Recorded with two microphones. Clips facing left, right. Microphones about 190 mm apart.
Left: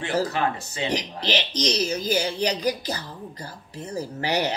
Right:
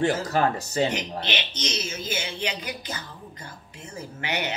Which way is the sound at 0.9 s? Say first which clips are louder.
Left 3 dB; 35° left (ahead or behind).